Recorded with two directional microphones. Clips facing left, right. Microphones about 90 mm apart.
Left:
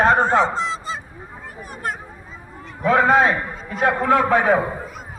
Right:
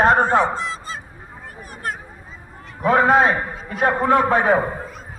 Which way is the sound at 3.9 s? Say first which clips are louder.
Even; 30° right (ahead or behind).